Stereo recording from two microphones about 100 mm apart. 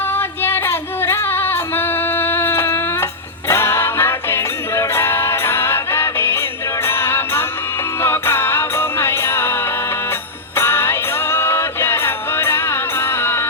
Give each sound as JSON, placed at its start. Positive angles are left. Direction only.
{"t": 0.1, "sound": "music", "side_deg": 25}